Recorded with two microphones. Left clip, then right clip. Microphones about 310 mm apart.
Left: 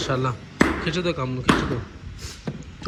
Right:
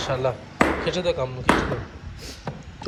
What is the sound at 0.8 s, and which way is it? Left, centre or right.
Speech, centre.